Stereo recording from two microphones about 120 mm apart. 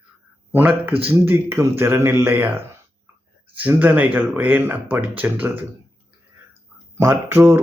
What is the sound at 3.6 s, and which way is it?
Speech, 15° right (ahead or behind).